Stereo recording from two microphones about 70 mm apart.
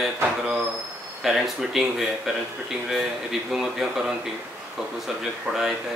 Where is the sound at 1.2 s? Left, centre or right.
Centre.